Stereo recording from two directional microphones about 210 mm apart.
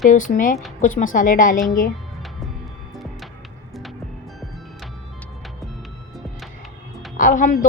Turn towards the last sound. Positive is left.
turn(degrees=40)  # may be behind; listen again after turning